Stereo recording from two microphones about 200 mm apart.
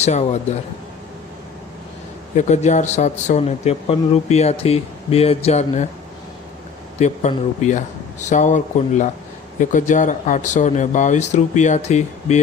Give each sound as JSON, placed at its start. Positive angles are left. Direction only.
{"t": 0.0, "sound": "speech", "side_deg": 35}
{"t": 2.3, "sound": "speech", "side_deg": 35}
{"t": 7.0, "sound": "speech", "side_deg": 35}